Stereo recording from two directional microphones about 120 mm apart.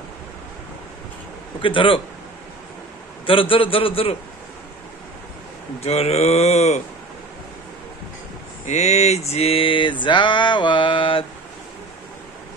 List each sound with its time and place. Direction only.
1.6 s mantra: 45° left (ahead or behind)
3.3 s mantra: 50° left (ahead or behind)
5.8 s speech: 60° left (ahead or behind)
8.6 s mantra: 70° left (ahead or behind); by 11.2 s 45° left (ahead or behind)